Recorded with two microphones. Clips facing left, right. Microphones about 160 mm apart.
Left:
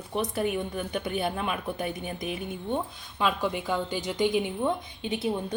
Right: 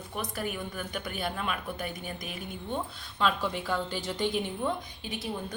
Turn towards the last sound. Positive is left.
turn(degrees=25)  # may be behind; listen again after turning